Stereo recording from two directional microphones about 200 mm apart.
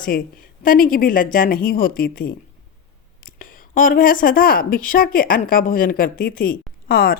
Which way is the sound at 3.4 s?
45° left (ahead or behind).